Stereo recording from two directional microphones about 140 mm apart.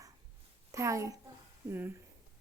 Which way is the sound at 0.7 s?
20° right (ahead or behind).